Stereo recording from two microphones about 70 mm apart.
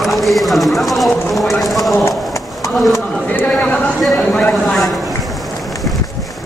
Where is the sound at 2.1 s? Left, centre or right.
Left.